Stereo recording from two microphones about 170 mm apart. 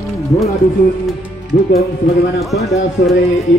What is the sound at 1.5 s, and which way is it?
Speech, 55° left (ahead or behind).